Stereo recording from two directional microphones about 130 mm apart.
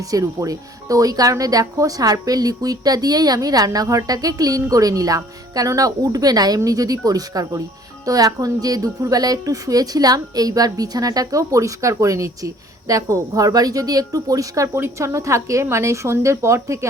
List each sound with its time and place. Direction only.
0.1 s speech: 25° right (ahead or behind)